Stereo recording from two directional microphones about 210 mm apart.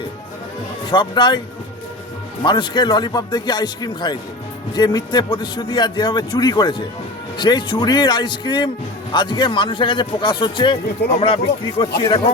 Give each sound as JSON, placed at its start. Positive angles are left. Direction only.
{"t": 0.9, "sound": "a man's voice", "side_deg": 20}
{"t": 2.4, "sound": "a man's voice", "side_deg": 20}
{"t": 11.0, "sound": "speech", "side_deg": 50}
{"t": 11.9, "sound": "a man's voice", "side_deg": 20}